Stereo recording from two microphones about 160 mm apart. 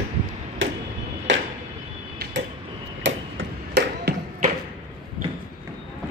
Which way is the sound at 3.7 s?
90° right.